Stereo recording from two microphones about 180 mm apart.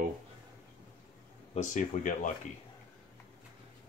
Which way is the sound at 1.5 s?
40° left (ahead or behind).